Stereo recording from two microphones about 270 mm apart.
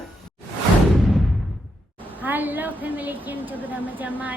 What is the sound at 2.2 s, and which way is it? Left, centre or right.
A woman's voice, centre.